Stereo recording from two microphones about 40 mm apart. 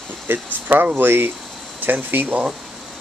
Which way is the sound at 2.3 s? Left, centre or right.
Right.